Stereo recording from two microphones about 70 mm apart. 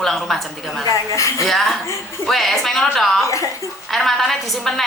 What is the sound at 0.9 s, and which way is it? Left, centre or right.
Speech, left.